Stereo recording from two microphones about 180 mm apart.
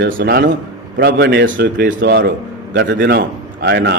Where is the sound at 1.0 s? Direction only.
65° right (ahead or behind).